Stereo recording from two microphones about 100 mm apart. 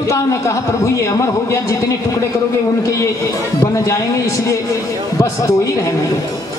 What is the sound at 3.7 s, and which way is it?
A woman's voice, 30° left (ahead or behind).